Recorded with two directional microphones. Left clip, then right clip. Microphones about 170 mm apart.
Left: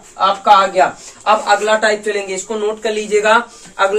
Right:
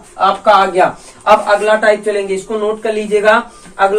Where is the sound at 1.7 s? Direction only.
45° left (ahead or behind).